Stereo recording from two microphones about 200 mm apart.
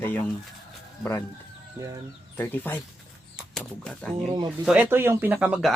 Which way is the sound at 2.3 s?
10° left (ahead or behind).